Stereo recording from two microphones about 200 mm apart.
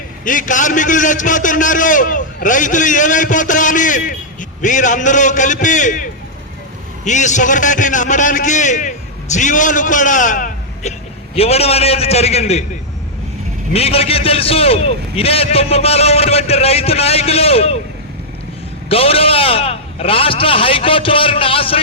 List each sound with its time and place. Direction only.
0.3 s a man's voice: 40° left (ahead or behind)
13.7 s a man's voice: 30° left (ahead or behind)
18.9 s a man's voice: 30° left (ahead or behind)